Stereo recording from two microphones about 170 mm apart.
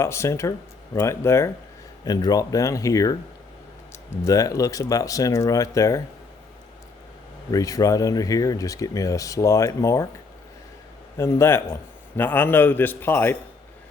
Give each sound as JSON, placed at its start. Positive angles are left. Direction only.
{"t": 0.0, "sound": "a man's voice", "side_deg": 15}
{"t": 4.3, "sound": "speech", "side_deg": 20}
{"t": 7.5, "sound": "speech", "side_deg": 20}
{"t": 11.2, "sound": "a man's voice", "side_deg": 15}